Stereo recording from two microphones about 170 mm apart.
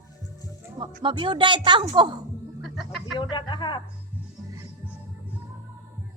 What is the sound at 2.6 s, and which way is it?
Chicken, centre (ahead or behind).